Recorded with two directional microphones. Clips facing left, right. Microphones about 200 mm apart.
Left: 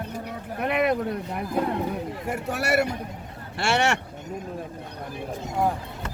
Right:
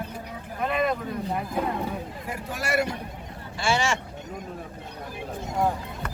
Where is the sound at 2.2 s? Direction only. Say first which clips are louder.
Left 5 dB; 65° left (ahead or behind).